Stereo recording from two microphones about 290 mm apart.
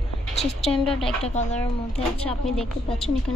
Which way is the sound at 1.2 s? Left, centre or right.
Left.